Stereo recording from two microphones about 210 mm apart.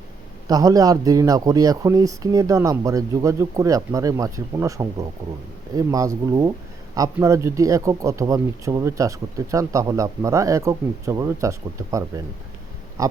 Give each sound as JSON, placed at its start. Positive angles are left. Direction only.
{"t": 0.4, "sound": "speech", "side_deg": -15}